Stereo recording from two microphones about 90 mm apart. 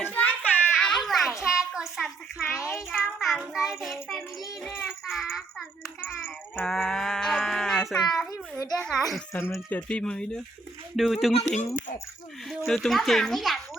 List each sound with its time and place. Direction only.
0.0 s a sound: 15° left (ahead or behind)
0.8 s a sound: 5° left (ahead or behind)
2.5 s child singing: 5° right (ahead or behind)
6.0 s a child's voice: 20° left (ahead or behind)
6.7 s a child's voice: 5° left (ahead or behind)
8.7 s child singing: 5° left (ahead or behind)
9.3 s speech: 30° left (ahead or behind)
9.6 s speech: 20° left (ahead or behind)
10.0 s a child's voice: 10° left (ahead or behind)
10.9 s child singing: centre (ahead or behind)
12.5 s child singing: centre (ahead or behind)